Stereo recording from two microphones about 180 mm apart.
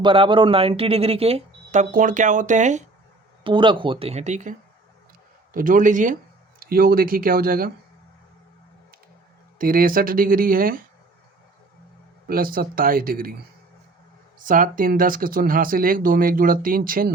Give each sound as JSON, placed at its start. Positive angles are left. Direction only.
{"t": 0.0, "sound": "speech", "side_deg": -30}
{"t": 3.4, "sound": "speech", "side_deg": -25}
{"t": 5.5, "sound": "speech", "side_deg": -45}
{"t": 9.6, "sound": "speech", "side_deg": -50}
{"t": 12.3, "sound": "speech", "side_deg": -55}
{"t": 14.3, "sound": "speech", "side_deg": -50}